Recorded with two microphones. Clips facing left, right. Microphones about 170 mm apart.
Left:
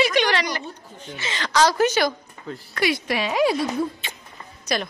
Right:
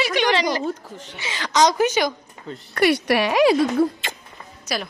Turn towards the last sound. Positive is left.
turn(degrees=-5)  # may be behind; listen again after turning